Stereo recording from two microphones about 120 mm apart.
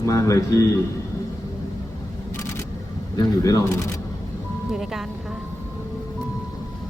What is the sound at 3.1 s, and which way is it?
Speech, 30° left (ahead or behind).